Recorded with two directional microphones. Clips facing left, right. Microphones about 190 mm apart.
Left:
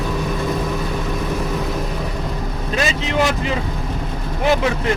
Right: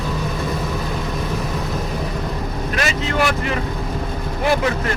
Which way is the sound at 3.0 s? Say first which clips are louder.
Left 1 dB; 20° left (ahead or behind).